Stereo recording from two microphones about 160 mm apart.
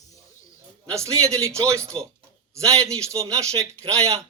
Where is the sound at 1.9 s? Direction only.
30° right (ahead or behind).